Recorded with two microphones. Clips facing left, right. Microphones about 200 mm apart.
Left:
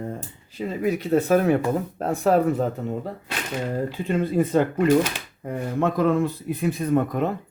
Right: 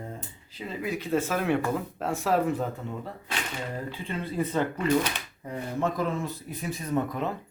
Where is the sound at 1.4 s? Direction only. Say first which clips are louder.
Left 5 dB; 40° left (ahead or behind).